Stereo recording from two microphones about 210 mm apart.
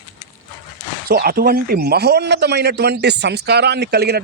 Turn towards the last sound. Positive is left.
turn(degrees=-50)  # may be behind; listen again after turning